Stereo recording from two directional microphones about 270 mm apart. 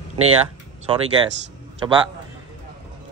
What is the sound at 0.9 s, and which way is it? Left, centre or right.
Speech, centre.